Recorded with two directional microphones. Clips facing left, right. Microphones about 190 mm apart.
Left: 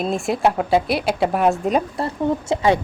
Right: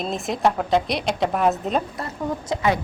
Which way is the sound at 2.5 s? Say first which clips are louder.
Left 3 dB; 30° left (ahead or behind).